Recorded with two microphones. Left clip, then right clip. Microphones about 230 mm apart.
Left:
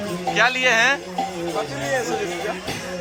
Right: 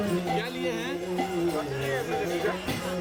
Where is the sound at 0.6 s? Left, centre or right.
Left.